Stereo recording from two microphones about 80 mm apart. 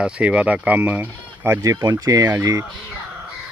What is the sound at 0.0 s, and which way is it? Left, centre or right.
Speech, centre.